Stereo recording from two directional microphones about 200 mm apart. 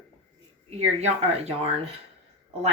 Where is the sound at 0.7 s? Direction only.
30° right (ahead or behind).